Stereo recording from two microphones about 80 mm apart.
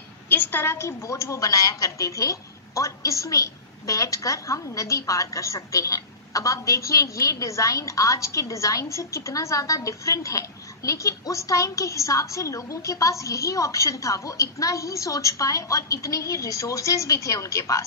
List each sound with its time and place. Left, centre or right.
0.3 s a woman's voice: left